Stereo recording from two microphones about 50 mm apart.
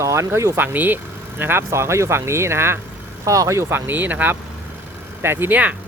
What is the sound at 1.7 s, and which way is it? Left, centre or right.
Speech, right.